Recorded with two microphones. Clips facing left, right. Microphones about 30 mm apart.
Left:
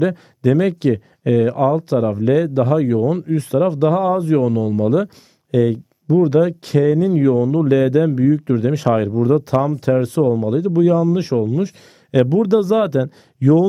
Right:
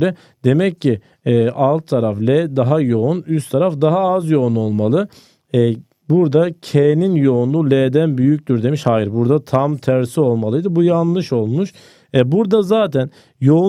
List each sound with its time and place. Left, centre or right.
0.0 s speech: right
4.4 s speech: centre
8.2 s speech: centre
12.1 s speech: right
13.4 s speech: centre